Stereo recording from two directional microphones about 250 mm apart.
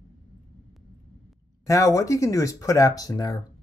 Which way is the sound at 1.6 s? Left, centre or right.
Centre.